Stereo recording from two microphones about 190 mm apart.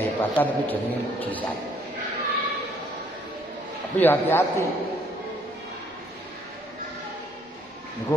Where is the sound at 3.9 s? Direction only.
10° left (ahead or behind).